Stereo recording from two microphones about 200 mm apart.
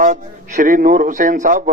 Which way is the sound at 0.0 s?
40° right (ahead or behind).